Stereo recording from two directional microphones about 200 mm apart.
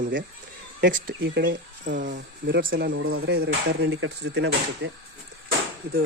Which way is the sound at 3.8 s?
65° right (ahead or behind).